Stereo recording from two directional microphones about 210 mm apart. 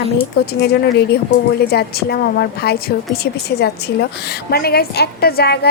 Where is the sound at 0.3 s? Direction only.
50° left (ahead or behind).